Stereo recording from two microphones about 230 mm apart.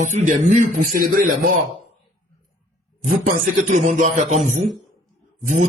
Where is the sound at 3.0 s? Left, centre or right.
Right.